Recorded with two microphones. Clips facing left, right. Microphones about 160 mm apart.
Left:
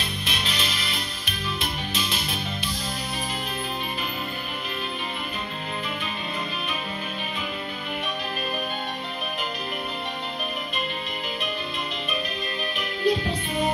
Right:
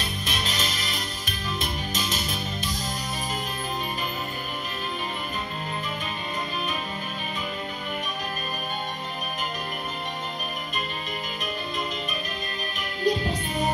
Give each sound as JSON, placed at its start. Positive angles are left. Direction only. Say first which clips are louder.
{"t": 0.3, "sound": "music", "louder": "even", "side_deg": -40}
{"t": 12.7, "sound": "music", "louder": "left 1 dB", "side_deg": -40}